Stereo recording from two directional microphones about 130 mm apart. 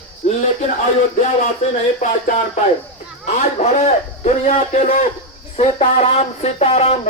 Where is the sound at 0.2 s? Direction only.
60° left (ahead or behind).